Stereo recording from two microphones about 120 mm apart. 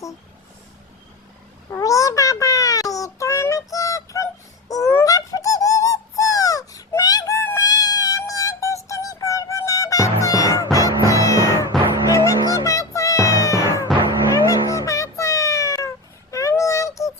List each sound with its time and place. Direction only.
1.8 s child singing: 25° left (ahead or behind)
4.7 s honk: 25° left (ahead or behind)
11.7 s music: centre (ahead or behind)
12.1 s music: 25° left (ahead or behind)
16.3 s child singing: 25° left (ahead or behind)